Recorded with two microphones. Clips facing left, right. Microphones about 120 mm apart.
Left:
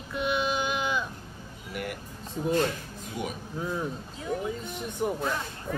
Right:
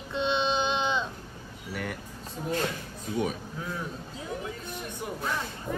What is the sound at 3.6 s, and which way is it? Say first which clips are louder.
Speech: left 4 dB; 25° left (ahead or behind).